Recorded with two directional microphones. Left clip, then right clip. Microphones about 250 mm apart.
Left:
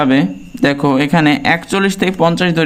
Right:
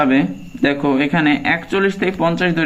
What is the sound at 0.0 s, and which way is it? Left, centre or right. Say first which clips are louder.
Speech: left 2 dB; left.